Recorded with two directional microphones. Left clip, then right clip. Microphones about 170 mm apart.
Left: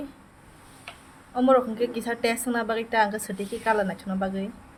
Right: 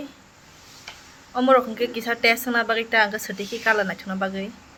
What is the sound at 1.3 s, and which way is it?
Speech, 5° left (ahead or behind).